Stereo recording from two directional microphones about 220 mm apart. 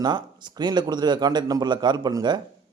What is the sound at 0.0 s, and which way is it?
A man's voice, 20° right (ahead or behind).